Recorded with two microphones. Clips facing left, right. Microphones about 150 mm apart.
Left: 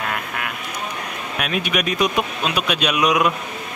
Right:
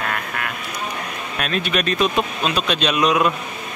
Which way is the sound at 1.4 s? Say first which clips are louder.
Right 1 dB; 10° left (ahead or behind).